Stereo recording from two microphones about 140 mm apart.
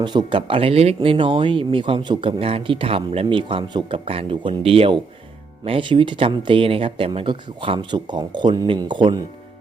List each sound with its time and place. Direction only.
0.0 s speech: 35° right (ahead or behind)